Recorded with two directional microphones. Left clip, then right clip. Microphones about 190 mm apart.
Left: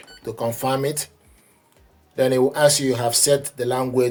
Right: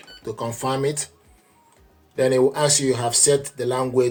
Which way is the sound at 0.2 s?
25° left (ahead or behind).